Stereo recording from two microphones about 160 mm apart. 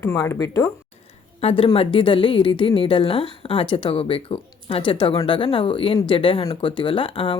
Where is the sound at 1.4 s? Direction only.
35° left (ahead or behind).